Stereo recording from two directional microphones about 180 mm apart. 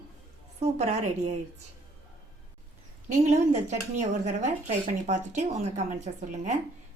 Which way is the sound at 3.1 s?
40° right (ahead or behind).